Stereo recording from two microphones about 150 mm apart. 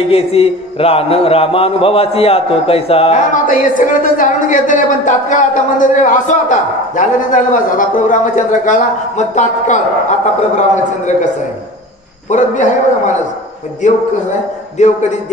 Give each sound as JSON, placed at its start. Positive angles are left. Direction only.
{"t": 0.1, "sound": "a man's voice", "side_deg": 40}
{"t": 3.4, "sound": "a woman's voice", "side_deg": 60}
{"t": 12.3, "sound": "a man's voice", "side_deg": 55}